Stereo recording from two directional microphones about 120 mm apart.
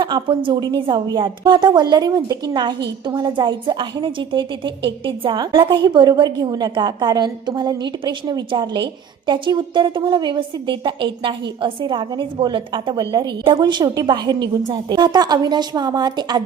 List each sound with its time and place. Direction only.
0.0 s a woman's voice: 40° right (ahead or behind)